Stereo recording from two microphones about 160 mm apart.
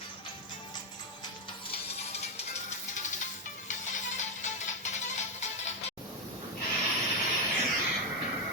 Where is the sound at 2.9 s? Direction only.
50° left (ahead or behind).